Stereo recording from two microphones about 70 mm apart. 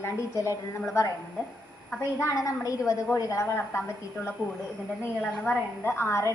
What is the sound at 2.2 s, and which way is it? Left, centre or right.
A woman's voice, left.